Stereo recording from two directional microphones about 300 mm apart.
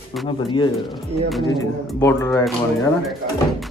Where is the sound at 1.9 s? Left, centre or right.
Centre.